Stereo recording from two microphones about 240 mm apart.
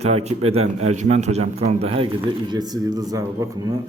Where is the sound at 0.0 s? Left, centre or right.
Right.